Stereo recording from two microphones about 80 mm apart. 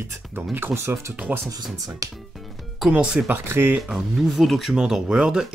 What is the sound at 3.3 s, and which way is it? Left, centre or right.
Speech, right.